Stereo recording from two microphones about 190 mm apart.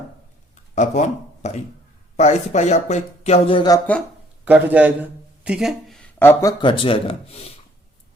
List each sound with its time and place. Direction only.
0.5 s speech: 40° left (ahead or behind)
4.4 s a man's voice: 10° right (ahead or behind); by 6.5 s 10° left (ahead or behind)
6.6 s speech: 25° left (ahead or behind)